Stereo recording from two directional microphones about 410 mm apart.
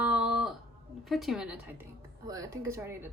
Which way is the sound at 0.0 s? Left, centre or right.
Centre.